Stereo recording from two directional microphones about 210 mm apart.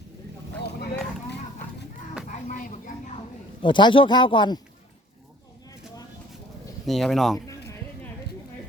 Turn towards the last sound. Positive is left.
turn(degrees=0)  # may be behind; listen again after turning